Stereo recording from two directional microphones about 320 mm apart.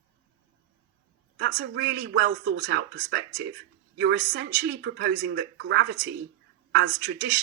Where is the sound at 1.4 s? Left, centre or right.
Right.